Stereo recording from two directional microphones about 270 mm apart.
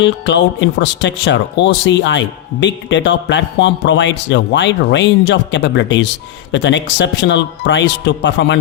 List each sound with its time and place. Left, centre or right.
0.0 s speech: left